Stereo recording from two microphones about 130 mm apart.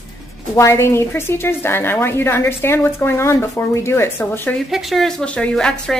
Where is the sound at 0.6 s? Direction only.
20° left (ahead or behind).